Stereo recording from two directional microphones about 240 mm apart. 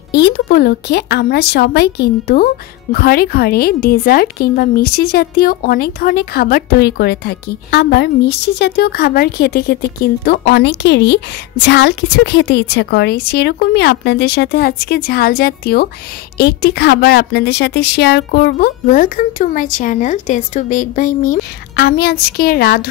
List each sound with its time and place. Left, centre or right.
0.1 s a woman's voice: left